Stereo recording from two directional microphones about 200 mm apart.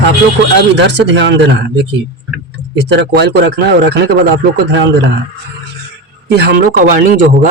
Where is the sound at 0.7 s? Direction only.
60° right (ahead or behind).